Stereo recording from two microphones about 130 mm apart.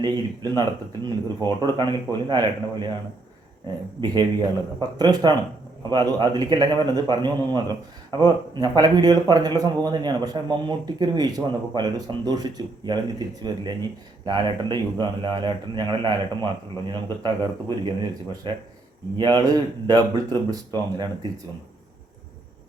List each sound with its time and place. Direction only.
0.0 s speech: 30° right (ahead or behind)
4.0 s speech: 30° right (ahead or behind)